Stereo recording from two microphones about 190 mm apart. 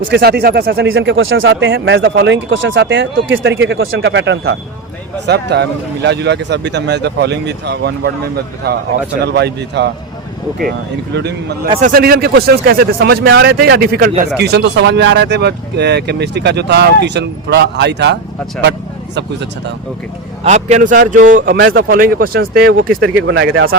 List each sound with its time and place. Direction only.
0.1 s speech: 55° right (ahead or behind)
0.9 s speech: 85° right; by 8.1 s 60° right (ahead or behind)
9.2 s speech: 60° right (ahead or behind)
11.8 s speech: 50° right (ahead or behind); by 18.2 s 65° right (ahead or behind)
20.4 s a man's voice: 35° right (ahead or behind)
23.0 s speech: 75° right (ahead or behind)